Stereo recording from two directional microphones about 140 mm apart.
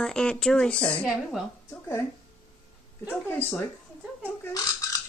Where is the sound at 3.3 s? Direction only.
15° left (ahead or behind).